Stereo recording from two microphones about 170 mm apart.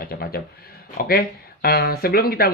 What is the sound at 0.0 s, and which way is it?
Speech, 60° left (ahead or behind).